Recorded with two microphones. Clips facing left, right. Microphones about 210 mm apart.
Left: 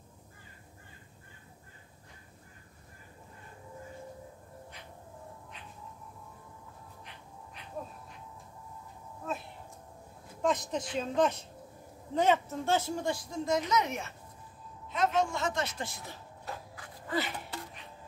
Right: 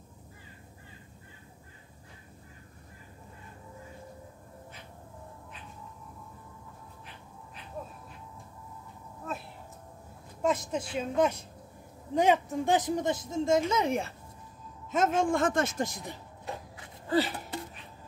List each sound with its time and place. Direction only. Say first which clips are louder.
10.4 s speech: right 1 dB; 5° right (ahead or behind); by 14.1 s 30° right (ahead or behind)
14.9 s a man's voice: right 3 dB; 50° right (ahead or behind)
16.0 s a sound: right 4 dB; 20° right (ahead or behind)